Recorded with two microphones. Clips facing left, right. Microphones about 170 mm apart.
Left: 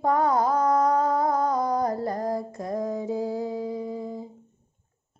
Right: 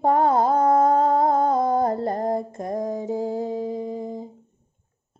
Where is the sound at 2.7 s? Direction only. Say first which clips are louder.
Right 2 dB; 45° right (ahead or behind).